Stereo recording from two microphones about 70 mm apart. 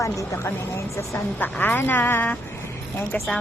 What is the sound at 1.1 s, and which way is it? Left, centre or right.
A woman's voice, left.